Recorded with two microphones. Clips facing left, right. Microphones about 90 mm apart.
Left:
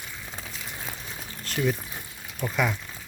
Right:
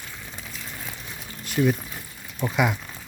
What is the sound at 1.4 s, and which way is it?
Pour, 10° right (ahead or behind).